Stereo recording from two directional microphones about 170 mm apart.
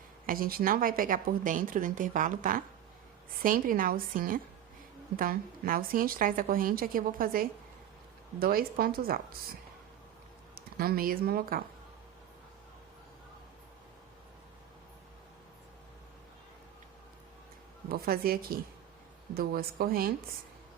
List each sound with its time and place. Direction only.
0.3 s a woman's voice: 60° right (ahead or behind)
10.5 s speech: 60° right (ahead or behind)
17.8 s a woman's voice: 60° right (ahead or behind)